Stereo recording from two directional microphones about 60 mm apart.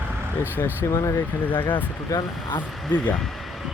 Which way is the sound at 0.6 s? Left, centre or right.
Left.